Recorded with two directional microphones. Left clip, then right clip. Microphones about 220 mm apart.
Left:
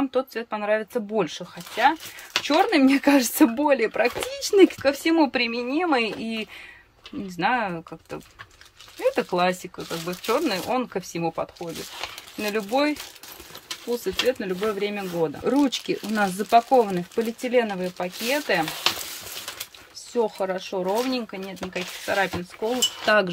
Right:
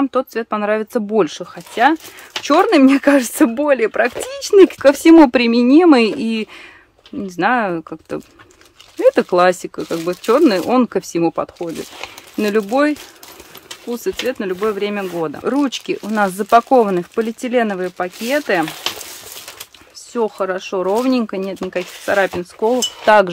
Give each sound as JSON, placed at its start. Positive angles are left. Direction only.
{"t": 0.0, "sound": "speech", "side_deg": -20}
{"t": 2.4, "sound": "speech", "side_deg": -20}
{"t": 9.0, "sound": "speech", "side_deg": -25}
{"t": 14.0, "sound": "speech", "side_deg": -15}
{"t": 20.1, "sound": "speech", "side_deg": -15}
{"t": 20.7, "sound": "speech", "side_deg": -35}
{"t": 23.0, "sound": "speech", "side_deg": -15}